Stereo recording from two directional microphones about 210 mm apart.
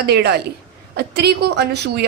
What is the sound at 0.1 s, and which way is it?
A woman's voice, 50° right (ahead or behind).